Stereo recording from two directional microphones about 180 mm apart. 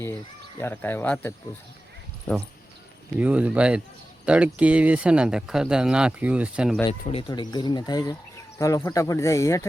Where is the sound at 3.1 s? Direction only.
10° right (ahead or behind).